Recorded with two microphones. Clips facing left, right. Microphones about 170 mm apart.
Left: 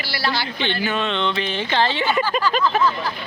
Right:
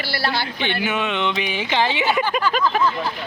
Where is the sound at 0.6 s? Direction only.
15° right (ahead or behind).